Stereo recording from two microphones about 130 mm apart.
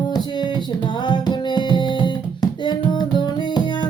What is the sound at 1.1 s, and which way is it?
Music, 35° left (ahead or behind).